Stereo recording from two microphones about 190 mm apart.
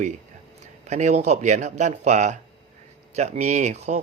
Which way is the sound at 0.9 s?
35° right (ahead or behind).